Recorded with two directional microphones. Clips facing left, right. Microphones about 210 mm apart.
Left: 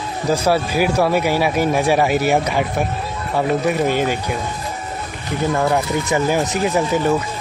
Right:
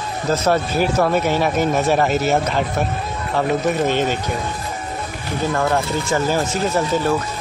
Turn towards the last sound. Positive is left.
turn(degrees=15)  # may be behind; listen again after turning